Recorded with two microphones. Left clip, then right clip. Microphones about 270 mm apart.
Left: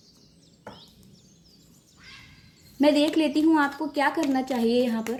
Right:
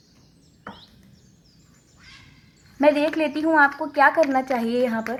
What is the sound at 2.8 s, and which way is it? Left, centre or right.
Speech, right.